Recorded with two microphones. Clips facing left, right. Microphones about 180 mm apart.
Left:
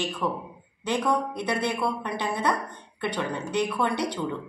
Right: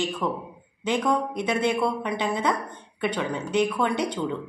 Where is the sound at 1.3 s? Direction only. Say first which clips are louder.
Right 3 dB; 20° right (ahead or behind).